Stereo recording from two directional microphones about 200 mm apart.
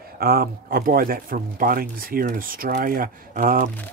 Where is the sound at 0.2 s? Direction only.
50° right (ahead or behind).